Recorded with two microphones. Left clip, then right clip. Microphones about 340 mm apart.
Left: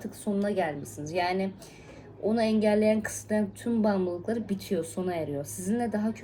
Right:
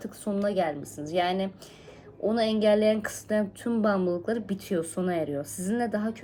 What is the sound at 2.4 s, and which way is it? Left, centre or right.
Speech, right.